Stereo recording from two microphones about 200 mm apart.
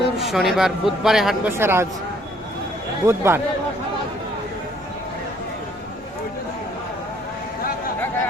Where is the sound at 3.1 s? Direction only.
10° right (ahead or behind).